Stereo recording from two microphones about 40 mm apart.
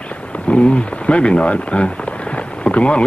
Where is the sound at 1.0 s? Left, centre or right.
Left.